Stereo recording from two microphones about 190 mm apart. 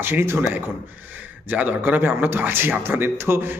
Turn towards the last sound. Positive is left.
turn(degrees=-10)  # may be behind; listen again after turning